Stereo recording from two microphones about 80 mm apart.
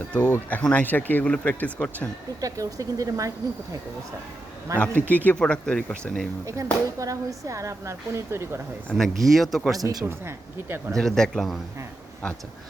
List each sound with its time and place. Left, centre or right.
0.1 s speech: centre
2.4 s speech: right
4.8 s speech: left
6.4 s speech: right
8.9 s speech: centre
9.7 s speech: right
10.1 s speech: right
10.9 s speech: centre